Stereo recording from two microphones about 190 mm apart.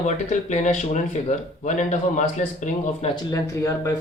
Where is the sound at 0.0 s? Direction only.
40° left (ahead or behind).